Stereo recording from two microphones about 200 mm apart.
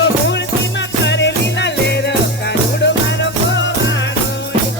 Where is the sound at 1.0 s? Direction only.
60° left (ahead or behind).